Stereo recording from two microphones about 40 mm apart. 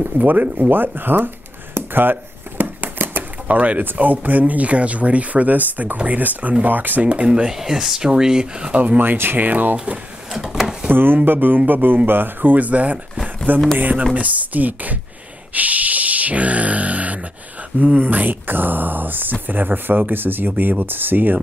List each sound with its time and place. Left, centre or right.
0.0 s a sound: right
3.4 s speech: right
7.0 s speech: right
7.2 s speech: centre
8.8 s speech: right
10.3 s a sound: centre
10.9 s speech: right
11.3 s speech: right
15.5 s a sound: right
17.9 s speech: right